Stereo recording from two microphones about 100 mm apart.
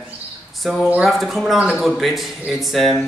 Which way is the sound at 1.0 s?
Centre (ahead or behind).